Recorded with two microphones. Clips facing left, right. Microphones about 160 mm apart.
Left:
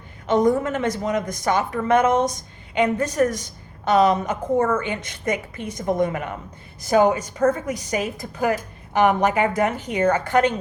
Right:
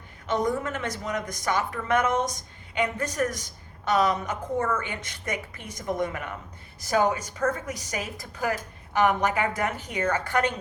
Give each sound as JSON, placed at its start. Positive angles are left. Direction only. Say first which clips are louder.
{"t": 0.3, "sound": "a woman's voice", "louder": "left 8 dB", "side_deg": 25}
{"t": 4.5, "sound": "a woman's voice", "louder": "left 7 dB", "side_deg": 45}
{"t": 4.8, "sound": "a woman's voice", "louder": "left 7 dB", "side_deg": 25}